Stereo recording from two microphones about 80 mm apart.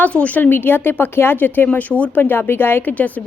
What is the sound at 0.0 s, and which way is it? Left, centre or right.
Speech, centre.